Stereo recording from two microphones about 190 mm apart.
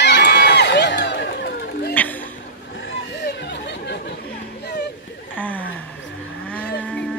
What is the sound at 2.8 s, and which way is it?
Chatter, 65° left (ahead or behind).